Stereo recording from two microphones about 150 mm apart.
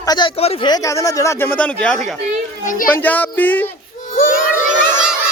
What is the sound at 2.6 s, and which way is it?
Speech, 65° left (ahead or behind).